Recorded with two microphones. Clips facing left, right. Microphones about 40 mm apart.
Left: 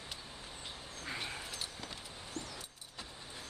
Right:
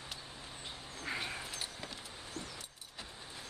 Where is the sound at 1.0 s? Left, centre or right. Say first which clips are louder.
Right 2 dB; centre.